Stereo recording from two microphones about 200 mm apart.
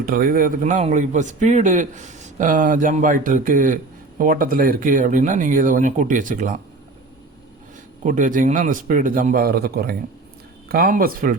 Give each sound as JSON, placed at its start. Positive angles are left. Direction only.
{"t": 0.0, "sound": "a man's voice", "side_deg": -45}
{"t": 8.0, "sound": "a man's voice", "side_deg": -40}